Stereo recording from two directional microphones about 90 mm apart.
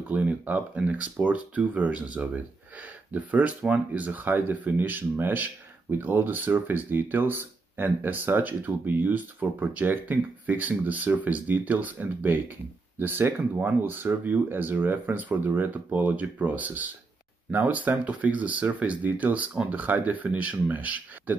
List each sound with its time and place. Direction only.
0.1 s speech: 15° right (ahead or behind)